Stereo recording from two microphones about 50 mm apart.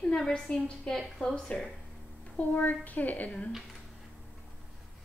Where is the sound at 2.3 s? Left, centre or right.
Left.